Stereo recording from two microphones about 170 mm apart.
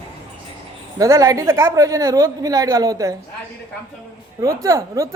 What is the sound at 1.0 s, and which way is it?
Speech, 20° right (ahead or behind).